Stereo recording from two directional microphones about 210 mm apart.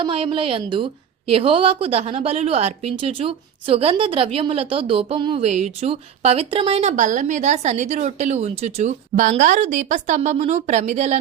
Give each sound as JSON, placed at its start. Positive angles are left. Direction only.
{"t": 0.0, "sound": "a woman's voice", "side_deg": -25}